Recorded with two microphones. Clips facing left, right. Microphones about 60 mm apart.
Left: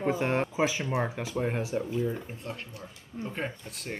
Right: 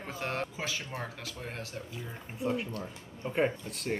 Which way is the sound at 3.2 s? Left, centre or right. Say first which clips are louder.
Left 2 dB; left.